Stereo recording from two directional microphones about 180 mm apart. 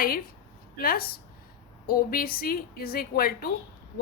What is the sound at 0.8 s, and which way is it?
A woman's voice, 55° left (ahead or behind).